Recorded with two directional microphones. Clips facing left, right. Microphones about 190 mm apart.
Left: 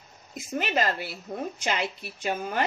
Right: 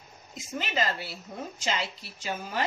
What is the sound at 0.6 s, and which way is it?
A woman's voice, 55° left (ahead or behind).